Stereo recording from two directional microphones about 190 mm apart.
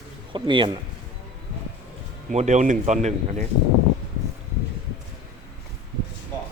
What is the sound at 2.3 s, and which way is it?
Speech, 35° right (ahead or behind).